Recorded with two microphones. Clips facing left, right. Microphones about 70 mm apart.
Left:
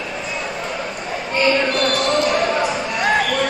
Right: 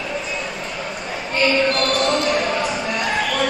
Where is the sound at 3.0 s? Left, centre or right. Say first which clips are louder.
Left 6 dB; left.